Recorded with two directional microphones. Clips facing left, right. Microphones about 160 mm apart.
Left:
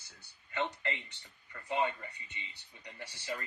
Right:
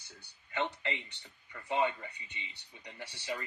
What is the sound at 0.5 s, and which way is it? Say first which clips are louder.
Speech: right 1 dB; 20° right (ahead or behind).